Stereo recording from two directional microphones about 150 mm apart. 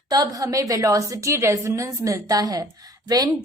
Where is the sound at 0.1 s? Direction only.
25° right (ahead or behind).